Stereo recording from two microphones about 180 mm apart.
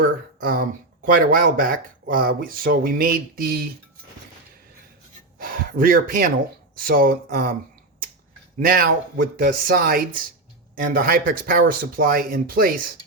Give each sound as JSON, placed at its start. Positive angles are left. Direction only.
{"t": 0.0, "sound": "speech", "side_deg": -50}
{"t": 5.4, "sound": "speech", "side_deg": -50}
{"t": 8.5, "sound": "speech", "side_deg": -55}